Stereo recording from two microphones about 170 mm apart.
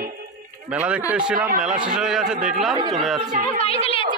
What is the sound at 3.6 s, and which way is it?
Speech, 35° left (ahead or behind).